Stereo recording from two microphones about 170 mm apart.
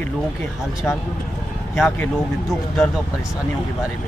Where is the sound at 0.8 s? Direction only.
10° left (ahead or behind).